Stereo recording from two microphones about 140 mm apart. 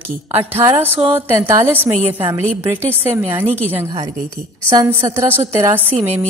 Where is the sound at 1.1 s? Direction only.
15° right (ahead or behind).